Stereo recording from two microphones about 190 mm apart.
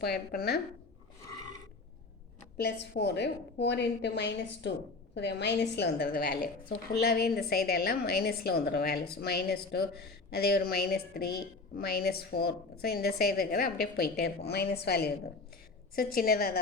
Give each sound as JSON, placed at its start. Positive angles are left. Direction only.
{"t": 0.0, "sound": "a woman's voice", "side_deg": 55}
{"t": 2.6, "sound": "a woman's voice", "side_deg": 60}